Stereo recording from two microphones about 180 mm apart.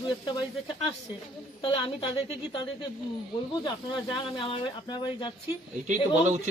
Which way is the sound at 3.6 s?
25° left (ahead or behind).